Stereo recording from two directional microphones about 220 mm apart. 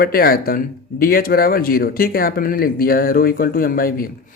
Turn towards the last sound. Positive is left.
turn(degrees=40)  # may be behind; listen again after turning